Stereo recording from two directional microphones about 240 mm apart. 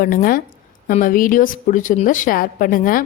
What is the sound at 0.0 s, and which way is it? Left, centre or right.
A woman's voice, left.